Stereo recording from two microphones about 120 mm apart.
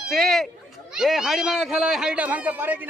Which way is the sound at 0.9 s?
5° right (ahead or behind).